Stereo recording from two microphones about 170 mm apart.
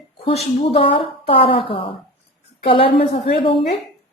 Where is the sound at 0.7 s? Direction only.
35° left (ahead or behind).